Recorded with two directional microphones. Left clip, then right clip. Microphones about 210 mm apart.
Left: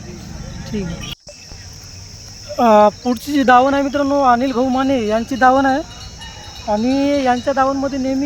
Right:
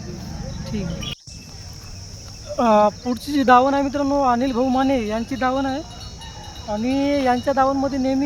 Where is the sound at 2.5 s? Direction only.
10° left (ahead or behind).